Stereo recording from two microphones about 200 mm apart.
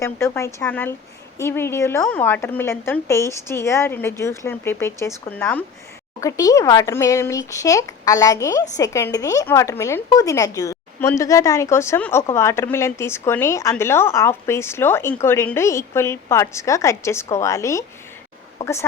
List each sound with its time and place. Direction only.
0.0 s speech: 15° left (ahead or behind)